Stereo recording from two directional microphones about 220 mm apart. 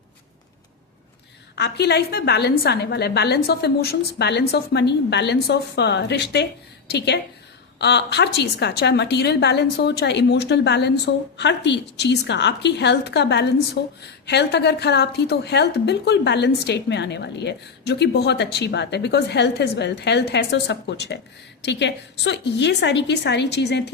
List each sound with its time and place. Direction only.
1.5 s a woman's voice: 50° left (ahead or behind)